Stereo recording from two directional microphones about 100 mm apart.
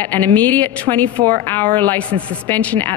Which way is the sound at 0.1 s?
15° left (ahead or behind).